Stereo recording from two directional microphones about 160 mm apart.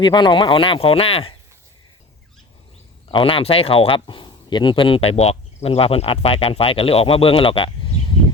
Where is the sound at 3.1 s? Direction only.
35° left (ahead or behind).